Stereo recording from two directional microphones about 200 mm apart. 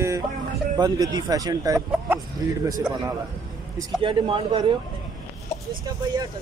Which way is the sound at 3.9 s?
25° right (ahead or behind).